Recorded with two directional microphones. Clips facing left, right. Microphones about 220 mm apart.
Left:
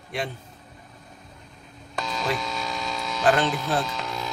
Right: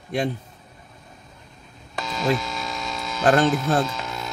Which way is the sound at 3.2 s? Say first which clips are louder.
Right 4 dB; 45° right (ahead or behind).